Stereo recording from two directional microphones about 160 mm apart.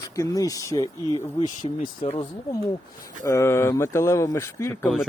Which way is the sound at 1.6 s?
35° left (ahead or behind).